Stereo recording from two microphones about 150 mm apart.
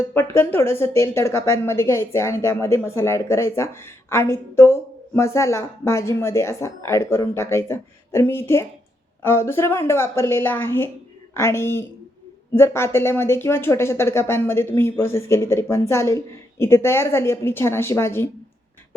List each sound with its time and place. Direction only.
0.1 s a woman's voice: 15° left (ahead or behind)